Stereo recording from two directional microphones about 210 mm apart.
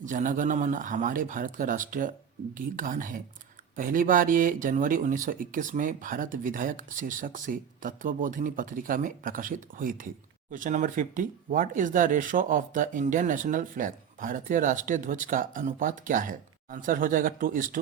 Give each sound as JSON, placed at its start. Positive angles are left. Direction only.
{"t": 0.0, "sound": "speech", "side_deg": -35}